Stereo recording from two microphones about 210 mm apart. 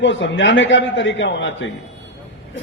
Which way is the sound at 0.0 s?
60° left (ahead or behind).